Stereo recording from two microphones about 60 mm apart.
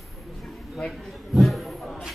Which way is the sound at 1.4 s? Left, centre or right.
Centre.